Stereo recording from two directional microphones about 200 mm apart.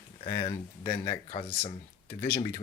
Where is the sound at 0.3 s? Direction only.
20° left (ahead or behind).